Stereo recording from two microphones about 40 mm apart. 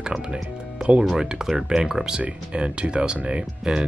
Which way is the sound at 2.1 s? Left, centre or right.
Right.